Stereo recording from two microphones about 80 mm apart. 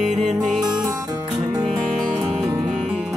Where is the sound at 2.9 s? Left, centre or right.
Centre.